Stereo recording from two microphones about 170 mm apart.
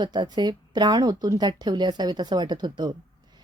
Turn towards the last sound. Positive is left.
turn(degrees=-25)  # may be behind; listen again after turning